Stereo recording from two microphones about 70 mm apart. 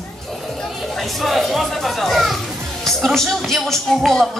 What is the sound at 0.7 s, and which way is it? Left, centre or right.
Children playing, centre.